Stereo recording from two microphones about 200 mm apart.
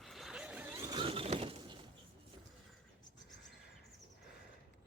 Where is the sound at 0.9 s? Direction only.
25° right (ahead or behind).